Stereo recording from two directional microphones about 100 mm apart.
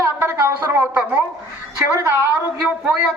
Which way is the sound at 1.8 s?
20° right (ahead or behind).